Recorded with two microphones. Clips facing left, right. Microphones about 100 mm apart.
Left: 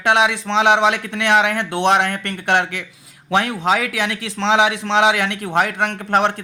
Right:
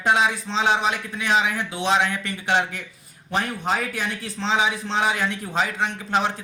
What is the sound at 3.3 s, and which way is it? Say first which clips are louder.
A man's voice: left 7 dB; 90° left.